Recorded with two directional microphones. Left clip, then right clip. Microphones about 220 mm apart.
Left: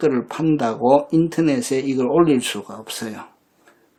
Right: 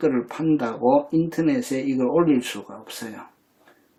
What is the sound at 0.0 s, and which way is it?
Speech, 45° left (ahead or behind).